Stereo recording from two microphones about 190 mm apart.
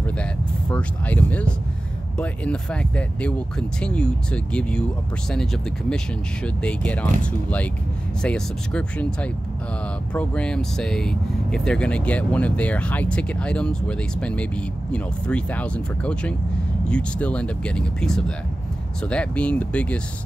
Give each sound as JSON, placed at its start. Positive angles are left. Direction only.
{"t": 0.2, "sound": "speech", "side_deg": 5}
{"t": 8.2, "sound": "speech", "side_deg": 5}